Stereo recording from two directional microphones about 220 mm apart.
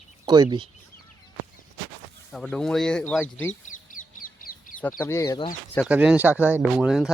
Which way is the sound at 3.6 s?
35° left (ahead or behind).